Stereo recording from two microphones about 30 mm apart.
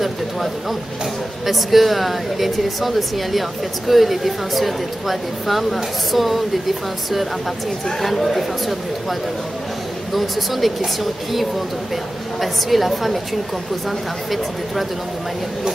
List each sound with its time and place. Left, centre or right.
0.0 s a sound: centre
1.4 s speech: centre
10.1 s speech: centre
12.4 s speech: centre